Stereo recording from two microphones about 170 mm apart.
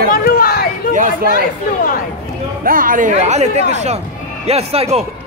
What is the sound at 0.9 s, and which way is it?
Speech, 50° right (ahead or behind).